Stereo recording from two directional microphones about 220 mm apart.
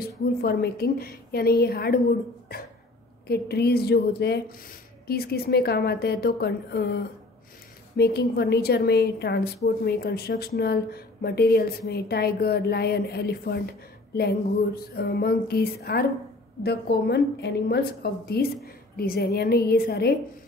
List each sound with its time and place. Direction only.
0.0 s a woman's voice: 45° left (ahead or behind)